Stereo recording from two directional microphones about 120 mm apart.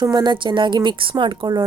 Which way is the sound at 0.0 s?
35° right (ahead or behind).